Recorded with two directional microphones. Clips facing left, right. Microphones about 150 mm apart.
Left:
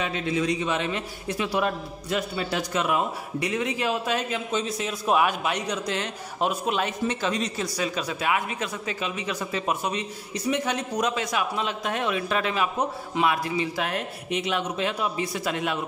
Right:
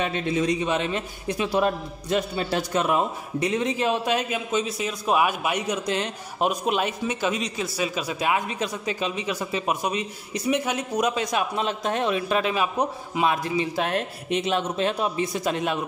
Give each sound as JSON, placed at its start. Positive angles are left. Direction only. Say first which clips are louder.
{"t": 0.0, "sound": "a man's voice", "louder": "right 2 dB", "side_deg": -20}
{"t": 3.3, "sound": "a man's voice", "louder": "right 3 dB", "side_deg": -25}
{"t": 4.5, "sound": "a man's voice", "louder": "right 2 dB", "side_deg": -5}
{"t": 5.9, "sound": "a man's voice", "louder": "right 3 dB", "side_deg": -20}
{"t": 7.8, "sound": "a man's voice", "louder": "right 2 dB", "side_deg": -10}
{"t": 9.3, "sound": "a man's voice", "louder": "left 1 dB", "side_deg": -10}
{"t": 11.1, "sound": "a man's voice", "louder": "right 2 dB", "side_deg": -25}